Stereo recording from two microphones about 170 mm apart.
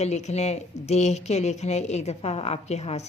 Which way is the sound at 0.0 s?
40° left (ahead or behind).